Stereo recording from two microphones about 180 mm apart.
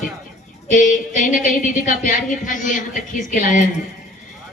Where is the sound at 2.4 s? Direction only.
45° left (ahead or behind).